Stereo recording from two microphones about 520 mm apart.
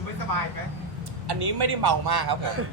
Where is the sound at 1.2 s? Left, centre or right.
Right.